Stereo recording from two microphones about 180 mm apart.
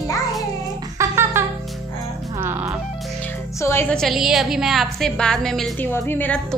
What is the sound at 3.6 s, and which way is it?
Speech, 15° left (ahead or behind).